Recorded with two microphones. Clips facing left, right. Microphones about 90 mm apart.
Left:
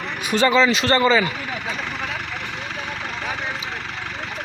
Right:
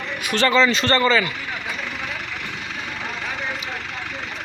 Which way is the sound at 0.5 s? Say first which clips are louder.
Right 2 dB; 5° left (ahead or behind).